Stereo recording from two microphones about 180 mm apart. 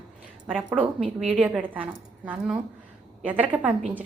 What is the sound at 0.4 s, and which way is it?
A woman's voice, 5° right (ahead or behind).